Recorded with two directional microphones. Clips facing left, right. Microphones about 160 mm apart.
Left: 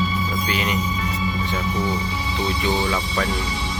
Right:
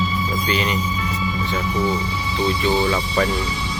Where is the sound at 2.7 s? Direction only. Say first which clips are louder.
Right 3 dB; 10° right (ahead or behind).